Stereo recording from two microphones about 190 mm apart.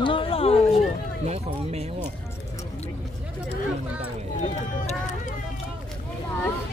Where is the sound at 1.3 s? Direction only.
35° right (ahead or behind).